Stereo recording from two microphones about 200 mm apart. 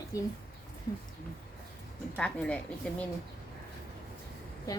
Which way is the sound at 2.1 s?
5° left (ahead or behind).